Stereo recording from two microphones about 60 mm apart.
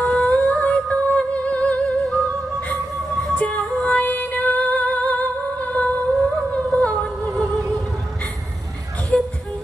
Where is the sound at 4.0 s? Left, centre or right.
Left.